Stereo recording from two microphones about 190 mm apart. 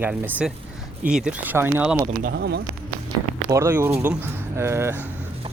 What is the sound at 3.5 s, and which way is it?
Speech, 15° right (ahead or behind).